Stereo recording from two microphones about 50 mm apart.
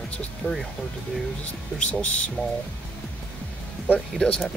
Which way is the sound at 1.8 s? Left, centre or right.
Left.